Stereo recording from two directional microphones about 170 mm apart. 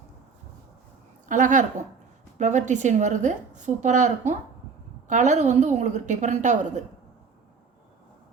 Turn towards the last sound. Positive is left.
turn(degrees=-45)  # may be behind; listen again after turning